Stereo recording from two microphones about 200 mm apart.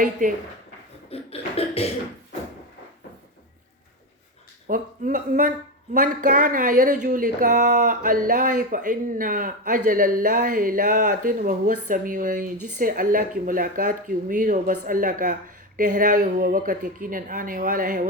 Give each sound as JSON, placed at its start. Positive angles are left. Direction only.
{"t": 0.0, "sound": "speech", "side_deg": -40}
{"t": 1.1, "sound": "cough", "side_deg": 30}
{"t": 4.7, "sound": "speech", "side_deg": -40}